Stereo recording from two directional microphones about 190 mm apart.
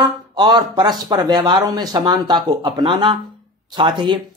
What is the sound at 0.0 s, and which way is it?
Speech, 25° right (ahead or behind).